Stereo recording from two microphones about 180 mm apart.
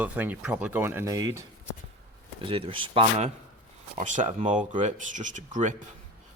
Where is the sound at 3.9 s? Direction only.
45° right (ahead or behind).